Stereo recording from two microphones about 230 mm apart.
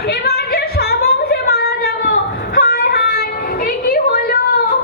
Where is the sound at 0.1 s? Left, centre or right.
Left.